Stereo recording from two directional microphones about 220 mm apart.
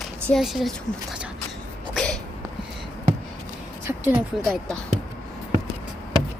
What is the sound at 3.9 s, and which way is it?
Speech, 5° right (ahead or behind).